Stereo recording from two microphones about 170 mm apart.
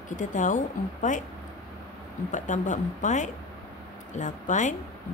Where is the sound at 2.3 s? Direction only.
45° left (ahead or behind).